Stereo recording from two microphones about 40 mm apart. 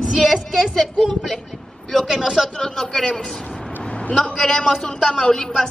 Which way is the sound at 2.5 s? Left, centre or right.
Centre.